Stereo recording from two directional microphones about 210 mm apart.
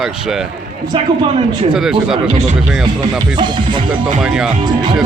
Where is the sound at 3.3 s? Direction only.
20° right (ahead or behind).